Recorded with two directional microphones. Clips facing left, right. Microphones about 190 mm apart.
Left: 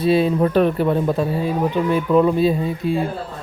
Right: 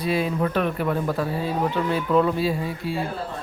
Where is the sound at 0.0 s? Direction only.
30° left (ahead or behind).